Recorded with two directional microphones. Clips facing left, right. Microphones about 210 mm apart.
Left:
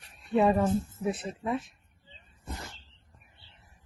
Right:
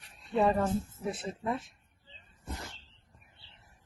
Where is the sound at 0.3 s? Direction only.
10° left (ahead or behind).